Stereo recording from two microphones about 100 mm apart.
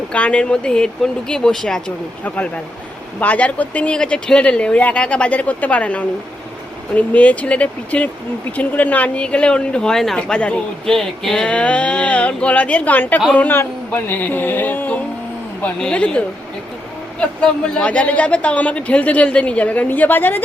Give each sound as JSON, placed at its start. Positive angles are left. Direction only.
{"t": 0.1, "sound": "speech", "side_deg": 10}
{"t": 13.3, "sound": "a sound", "side_deg": 20}
{"t": 15.6, "sound": "speech", "side_deg": 10}